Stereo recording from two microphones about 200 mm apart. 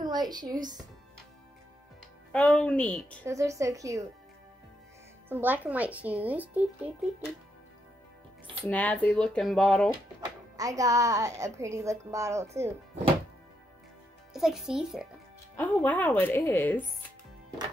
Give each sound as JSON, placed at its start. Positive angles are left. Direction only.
{"t": 0.0, "sound": "a woman's voice", "side_deg": -20}
{"t": 2.3, "sound": "speech", "side_deg": 5}
{"t": 3.3, "sound": "speech", "side_deg": -15}
{"t": 5.3, "sound": "speech", "side_deg": -10}
{"t": 8.6, "sound": "speech", "side_deg": 5}
{"t": 10.6, "sound": "speech", "side_deg": -15}
{"t": 14.3, "sound": "a child's voice", "side_deg": 0}
{"t": 15.5, "sound": "speech", "side_deg": 10}